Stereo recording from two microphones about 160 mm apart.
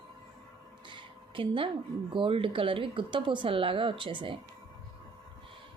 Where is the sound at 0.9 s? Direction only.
30° right (ahead or behind).